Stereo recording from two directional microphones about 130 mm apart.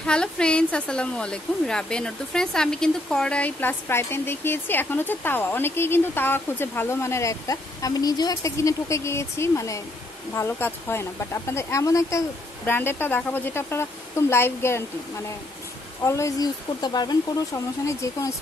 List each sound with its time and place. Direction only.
0.0 s a woman's voice: 5° left (ahead or behind)
16.0 s speech: 25° left (ahead or behind)